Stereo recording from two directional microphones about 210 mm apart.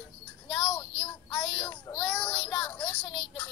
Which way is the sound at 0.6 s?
25° left (ahead or behind).